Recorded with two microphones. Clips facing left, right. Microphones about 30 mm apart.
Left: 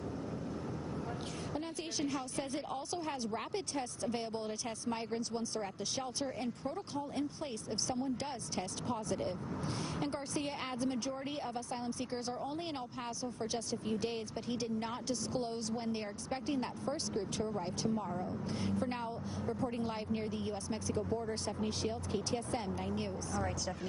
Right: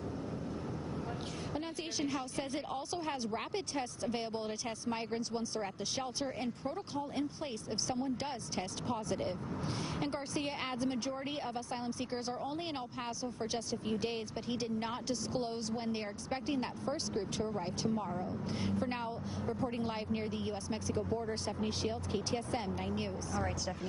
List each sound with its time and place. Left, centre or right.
1.5 s a woman's voice: centre
7.9 s speech: right
13.0 s speech: centre